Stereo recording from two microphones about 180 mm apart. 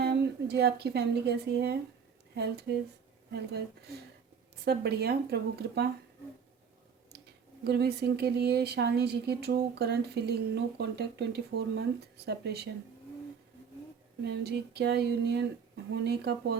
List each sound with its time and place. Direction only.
0.0 s a woman's voice: 65° right (ahead or behind)
7.6 s speech: 65° right (ahead or behind)
14.3 s speech: 70° right (ahead or behind)